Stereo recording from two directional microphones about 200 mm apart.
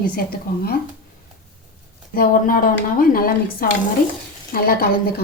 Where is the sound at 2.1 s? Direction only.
45° left (ahead or behind).